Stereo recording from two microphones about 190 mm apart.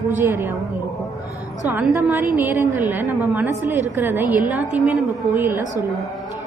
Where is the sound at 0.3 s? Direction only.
10° right (ahead or behind).